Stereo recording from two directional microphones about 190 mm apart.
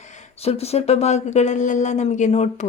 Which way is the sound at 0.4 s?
35° left (ahead or behind).